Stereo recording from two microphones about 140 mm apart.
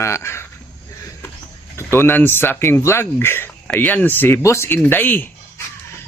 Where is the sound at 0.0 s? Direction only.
20° left (ahead or behind).